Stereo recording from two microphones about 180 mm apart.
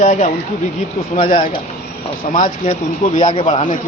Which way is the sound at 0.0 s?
45° left (ahead or behind).